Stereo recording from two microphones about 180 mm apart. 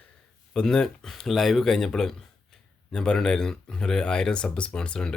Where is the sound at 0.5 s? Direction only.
5° left (ahead or behind).